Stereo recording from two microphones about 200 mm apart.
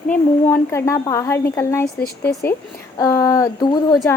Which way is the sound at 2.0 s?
50° left (ahead or behind).